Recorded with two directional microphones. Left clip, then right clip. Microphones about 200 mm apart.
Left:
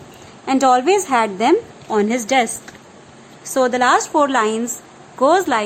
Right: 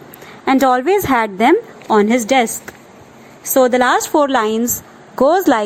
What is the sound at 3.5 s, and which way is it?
A woman's voice, 25° right (ahead or behind).